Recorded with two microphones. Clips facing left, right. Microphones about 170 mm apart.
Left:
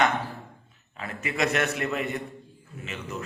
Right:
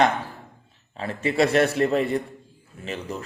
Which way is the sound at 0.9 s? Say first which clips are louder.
Right 7 dB; 30° right (ahead or behind).